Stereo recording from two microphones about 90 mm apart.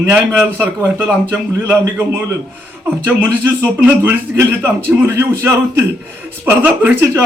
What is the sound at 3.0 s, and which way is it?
A man's voice, 20° right (ahead or behind).